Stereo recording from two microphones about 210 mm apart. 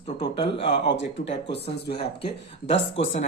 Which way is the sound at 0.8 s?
55° left (ahead or behind).